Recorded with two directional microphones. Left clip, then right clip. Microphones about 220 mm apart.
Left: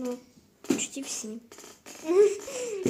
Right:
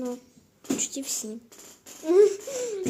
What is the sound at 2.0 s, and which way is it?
Speech, 15° right (ahead or behind).